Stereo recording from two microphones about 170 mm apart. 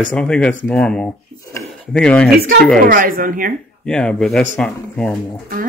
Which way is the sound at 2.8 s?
55° right (ahead or behind).